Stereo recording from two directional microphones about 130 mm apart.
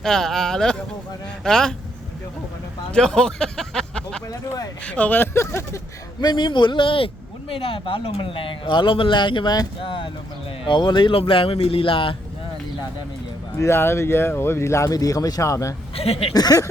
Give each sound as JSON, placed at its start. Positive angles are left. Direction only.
{"t": 0.0, "sound": "speech", "side_deg": 5}
{"t": 2.9, "sound": "speech", "side_deg": 5}
{"t": 6.2, "sound": "speech", "side_deg": 35}
{"t": 13.6, "sound": "speech", "side_deg": 20}
{"t": 16.0, "sound": "speech", "side_deg": 50}
{"t": 16.3, "sound": "speech", "side_deg": 30}